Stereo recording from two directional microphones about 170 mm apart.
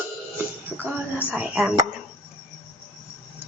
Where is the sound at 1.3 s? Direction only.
5° right (ahead or behind).